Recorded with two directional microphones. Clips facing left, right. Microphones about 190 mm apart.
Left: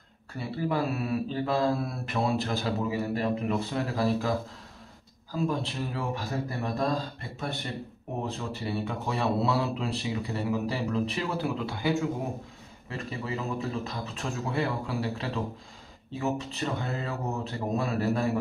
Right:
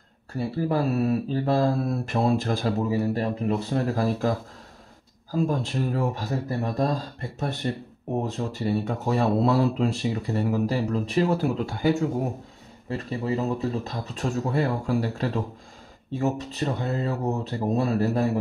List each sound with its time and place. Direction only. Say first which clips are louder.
0.4 s speech: right 4 dB; 40° right (ahead or behind)
5.3 s speech: right 4 dB; 45° right (ahead or behind)
12.9 s speech: right 7 dB; 40° right (ahead or behind)